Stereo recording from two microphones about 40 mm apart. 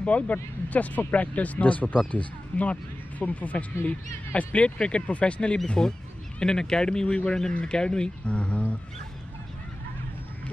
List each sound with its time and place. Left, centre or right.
0.0 s speech: left
5.7 s speech: centre